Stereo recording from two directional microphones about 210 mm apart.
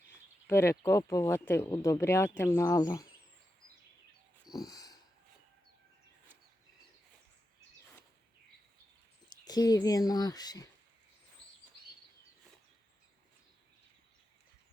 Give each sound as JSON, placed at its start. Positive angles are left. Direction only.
{"t": 0.4, "sound": "speech", "side_deg": 10}
{"t": 4.4, "sound": "a sound", "side_deg": 15}
{"t": 9.4, "sound": "speech", "side_deg": 20}